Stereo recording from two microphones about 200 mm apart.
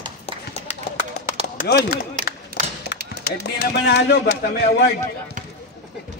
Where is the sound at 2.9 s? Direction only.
55° left (ahead or behind).